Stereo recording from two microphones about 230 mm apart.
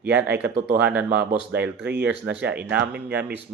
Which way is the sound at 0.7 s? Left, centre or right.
Centre.